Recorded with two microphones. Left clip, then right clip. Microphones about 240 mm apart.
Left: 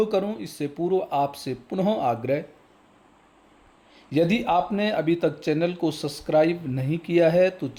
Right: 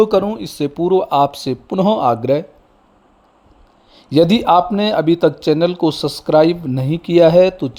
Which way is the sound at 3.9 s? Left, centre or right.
Right.